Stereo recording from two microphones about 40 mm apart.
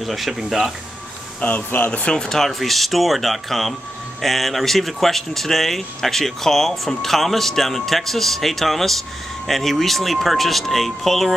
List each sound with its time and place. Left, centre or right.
0.0 s speech: centre
1.4 s speech: left
2.3 s speech: centre